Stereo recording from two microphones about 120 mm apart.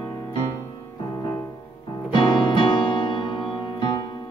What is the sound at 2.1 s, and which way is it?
Music, 40° left (ahead or behind).